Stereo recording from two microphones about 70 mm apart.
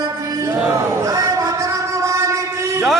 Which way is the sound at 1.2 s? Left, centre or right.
Right.